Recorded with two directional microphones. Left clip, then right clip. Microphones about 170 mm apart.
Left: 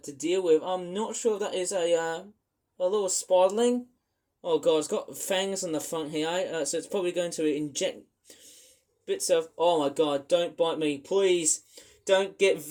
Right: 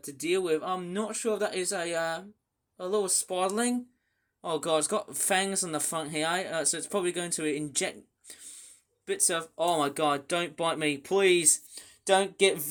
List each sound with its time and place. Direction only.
0.0 s speech: 35° right (ahead or behind)